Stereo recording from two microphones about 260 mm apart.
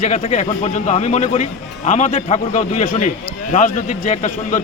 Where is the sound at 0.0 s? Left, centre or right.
Left.